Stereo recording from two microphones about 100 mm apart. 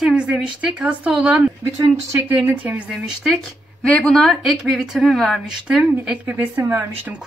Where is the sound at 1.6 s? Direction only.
30° right (ahead or behind).